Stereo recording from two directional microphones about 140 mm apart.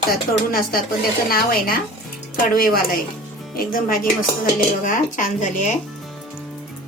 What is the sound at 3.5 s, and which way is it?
Speech, 90° left.